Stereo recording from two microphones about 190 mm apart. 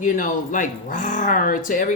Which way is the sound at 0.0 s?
45° left (ahead or behind).